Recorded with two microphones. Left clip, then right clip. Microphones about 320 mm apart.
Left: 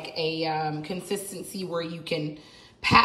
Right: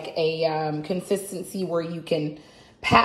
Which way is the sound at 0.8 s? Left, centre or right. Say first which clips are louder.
Right 6 dB; centre.